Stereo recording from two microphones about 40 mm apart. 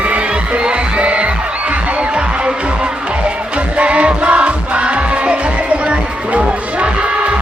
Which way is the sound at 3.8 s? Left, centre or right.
Right.